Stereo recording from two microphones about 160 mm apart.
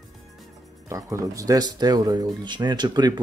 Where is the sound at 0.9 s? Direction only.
20° right (ahead or behind).